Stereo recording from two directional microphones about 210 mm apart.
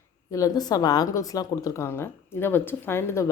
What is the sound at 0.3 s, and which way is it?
A woman's voice, 15° left (ahead or behind).